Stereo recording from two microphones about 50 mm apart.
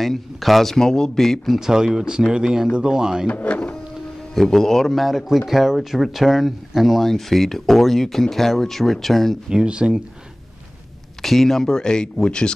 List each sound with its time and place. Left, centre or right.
0.0 s speech: centre
1.6 s speech: centre
3.3 s speech: left
4.4 s speech: centre
9.5 s speech: centre
11.2 s speech: centre